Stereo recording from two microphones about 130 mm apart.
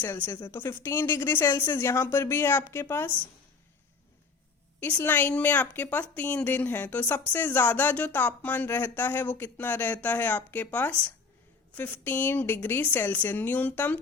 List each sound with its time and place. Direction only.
0.0 s a woman's voice: 20° left (ahead or behind)
4.8 s a woman's voice: 15° left (ahead or behind)